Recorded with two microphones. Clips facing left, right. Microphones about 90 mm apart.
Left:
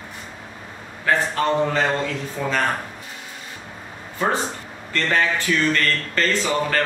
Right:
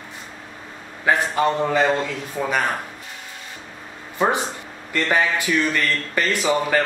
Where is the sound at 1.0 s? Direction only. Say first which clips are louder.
Right 1 dB; 10° right (ahead or behind).